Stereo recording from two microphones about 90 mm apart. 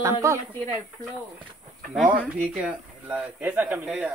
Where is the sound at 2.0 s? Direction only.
20° right (ahead or behind).